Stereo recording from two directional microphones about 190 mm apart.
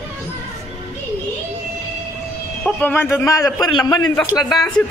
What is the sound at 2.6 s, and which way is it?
A man's voice, 10° left (ahead or behind).